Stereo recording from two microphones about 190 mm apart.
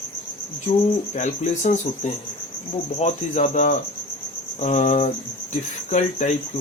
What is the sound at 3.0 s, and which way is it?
Cricket, 40° left (ahead or behind).